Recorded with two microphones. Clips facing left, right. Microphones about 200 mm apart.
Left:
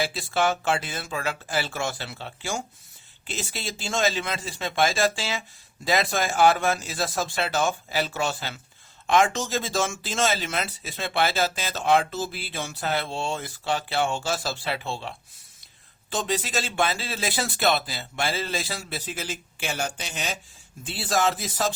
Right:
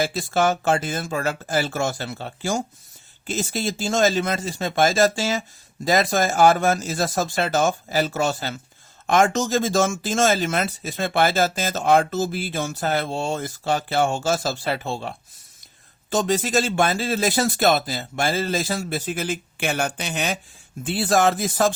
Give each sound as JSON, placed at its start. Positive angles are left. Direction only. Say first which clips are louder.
{"t": 0.0, "sound": "speech", "louder": "right 4 dB", "side_deg": -45}